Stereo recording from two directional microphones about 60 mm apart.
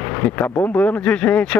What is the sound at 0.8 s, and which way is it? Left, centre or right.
Speech, left.